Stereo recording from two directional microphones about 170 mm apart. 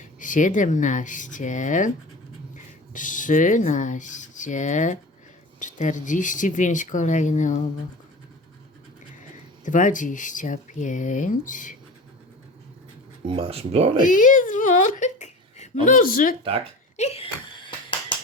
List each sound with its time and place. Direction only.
0.0 s speech: 50° left (ahead or behind)
2.9 s speech: 50° left (ahead or behind)
9.6 s speech: 50° left (ahead or behind)
13.2 s speech: 35° right (ahead or behind)
14.0 s speech: 50° left (ahead or behind)
17.0 s a sound: 35° left (ahead or behind)